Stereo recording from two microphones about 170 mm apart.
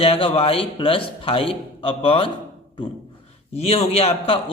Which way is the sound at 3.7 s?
35° left (ahead or behind).